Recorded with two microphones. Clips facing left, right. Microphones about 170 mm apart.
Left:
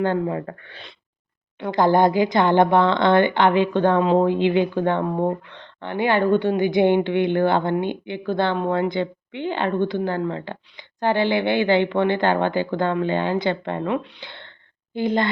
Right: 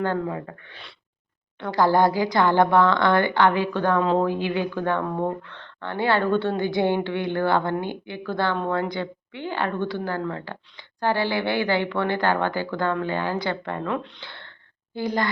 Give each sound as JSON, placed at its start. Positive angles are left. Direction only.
{"t": 0.0, "sound": "speech", "side_deg": 20}
{"t": 1.5, "sound": "speech", "side_deg": 15}